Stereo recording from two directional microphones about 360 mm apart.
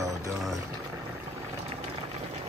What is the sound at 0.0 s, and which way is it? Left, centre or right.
Music, centre.